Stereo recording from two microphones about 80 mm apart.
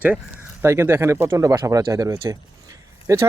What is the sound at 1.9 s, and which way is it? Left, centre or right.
Speech, right.